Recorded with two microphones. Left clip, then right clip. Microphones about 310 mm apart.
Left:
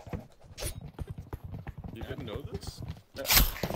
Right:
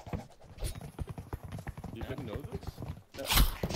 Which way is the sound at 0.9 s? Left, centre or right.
Centre.